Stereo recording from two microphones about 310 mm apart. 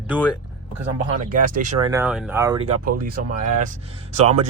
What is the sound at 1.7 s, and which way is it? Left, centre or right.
Speech, centre.